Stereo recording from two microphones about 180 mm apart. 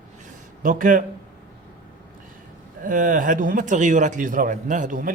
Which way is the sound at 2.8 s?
45° right (ahead or behind).